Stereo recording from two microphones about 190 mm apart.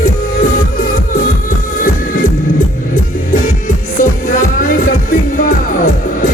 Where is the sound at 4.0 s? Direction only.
45° left (ahead or behind).